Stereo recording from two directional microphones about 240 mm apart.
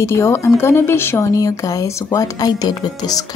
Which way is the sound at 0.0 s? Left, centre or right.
Centre.